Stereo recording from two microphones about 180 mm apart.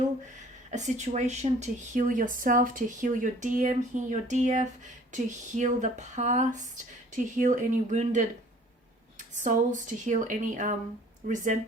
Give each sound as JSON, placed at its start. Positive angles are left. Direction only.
{"t": 0.7, "sound": "speech", "side_deg": -40}